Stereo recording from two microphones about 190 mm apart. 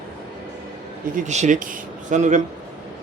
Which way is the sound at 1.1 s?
40° right (ahead or behind).